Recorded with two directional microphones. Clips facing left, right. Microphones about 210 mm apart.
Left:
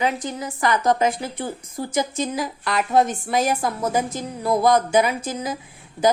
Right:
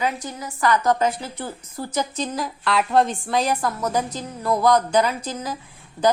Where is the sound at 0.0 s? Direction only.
20° left (ahead or behind).